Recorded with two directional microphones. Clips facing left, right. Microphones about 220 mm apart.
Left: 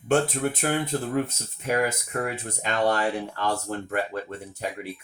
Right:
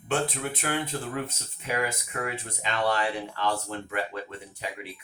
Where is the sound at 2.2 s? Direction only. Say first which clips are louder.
Left 3 dB; 45° left (ahead or behind).